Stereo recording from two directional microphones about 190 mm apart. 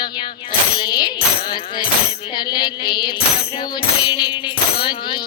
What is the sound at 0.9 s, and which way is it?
Music, 20° left (ahead or behind).